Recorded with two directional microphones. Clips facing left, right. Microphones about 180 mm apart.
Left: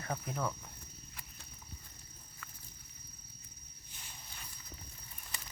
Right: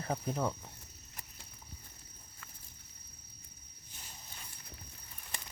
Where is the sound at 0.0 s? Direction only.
30° right (ahead or behind).